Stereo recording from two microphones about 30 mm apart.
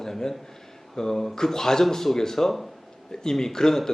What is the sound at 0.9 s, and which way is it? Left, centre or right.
Speech, centre.